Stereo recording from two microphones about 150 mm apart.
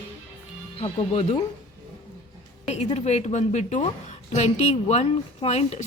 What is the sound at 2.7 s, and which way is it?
A woman's voice, 50° left (ahead or behind).